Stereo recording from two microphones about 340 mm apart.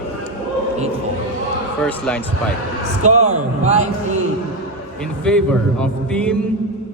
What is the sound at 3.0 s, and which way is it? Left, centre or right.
A man's voice, right.